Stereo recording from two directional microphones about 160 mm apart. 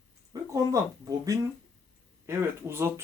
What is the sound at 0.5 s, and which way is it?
Speech, 20° right (ahead or behind).